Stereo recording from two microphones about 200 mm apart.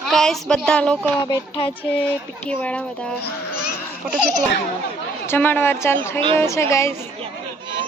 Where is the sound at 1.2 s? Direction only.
25° left (ahead or behind).